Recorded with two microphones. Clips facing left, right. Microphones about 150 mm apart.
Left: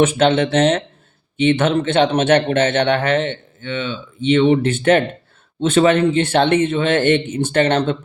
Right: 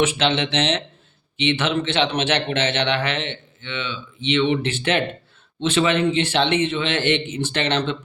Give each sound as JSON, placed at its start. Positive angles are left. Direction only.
{"t": 0.0, "sound": "a man's voice", "side_deg": 50}